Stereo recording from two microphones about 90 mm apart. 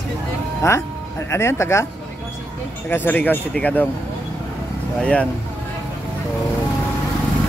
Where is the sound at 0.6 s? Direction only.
35° left (ahead or behind).